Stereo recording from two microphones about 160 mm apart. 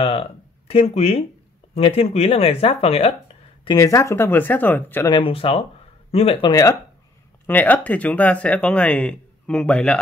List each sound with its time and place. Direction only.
0.0 s speech: 35° left (ahead or behind)
3.6 s speech: 20° left (ahead or behind)
5.1 s speech: 35° left (ahead or behind)
6.5 s speech: 20° left (ahead or behind)
7.4 s speech: 10° left (ahead or behind)